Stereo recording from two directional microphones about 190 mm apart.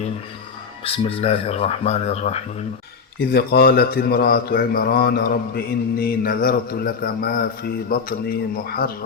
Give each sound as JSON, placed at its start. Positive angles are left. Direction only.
{"t": 0.9, "sound": "speech", "side_deg": 30}
{"t": 3.3, "sound": "speech", "side_deg": 55}